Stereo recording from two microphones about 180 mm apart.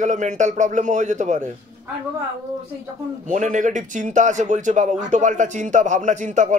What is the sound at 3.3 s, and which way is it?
Speech, 45° right (ahead or behind).